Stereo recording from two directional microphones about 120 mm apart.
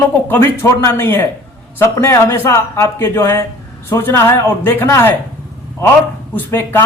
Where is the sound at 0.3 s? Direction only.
20° left (ahead or behind).